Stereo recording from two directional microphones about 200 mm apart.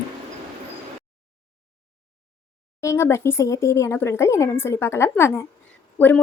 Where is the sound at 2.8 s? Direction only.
15° left (ahead or behind).